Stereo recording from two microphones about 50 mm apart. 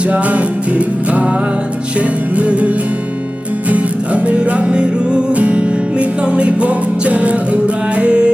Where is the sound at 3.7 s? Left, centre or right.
Right.